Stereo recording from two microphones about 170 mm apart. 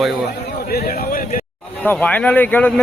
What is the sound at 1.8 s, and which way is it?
Speech, 10° left (ahead or behind).